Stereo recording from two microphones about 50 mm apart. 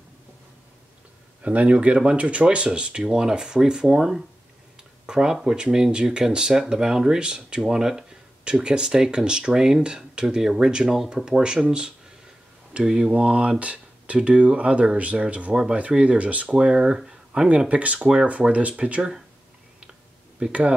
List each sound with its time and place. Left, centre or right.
1.4 s speech: right; by 13.1 s centre
13.1 s speech: right
16.5 s speech: centre
17.0 s a sound: centre
17.6 s speech: right
20.4 s speech: right